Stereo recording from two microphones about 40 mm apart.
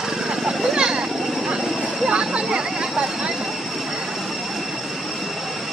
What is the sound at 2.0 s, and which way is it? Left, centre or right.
Vehicle, right.